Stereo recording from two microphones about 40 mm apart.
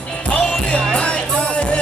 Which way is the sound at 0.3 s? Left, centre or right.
Left.